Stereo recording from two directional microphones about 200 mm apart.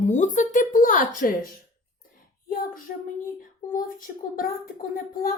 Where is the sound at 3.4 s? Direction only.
40° left (ahead or behind).